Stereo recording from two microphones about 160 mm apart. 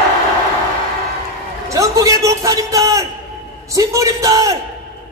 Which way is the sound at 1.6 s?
20° right (ahead or behind).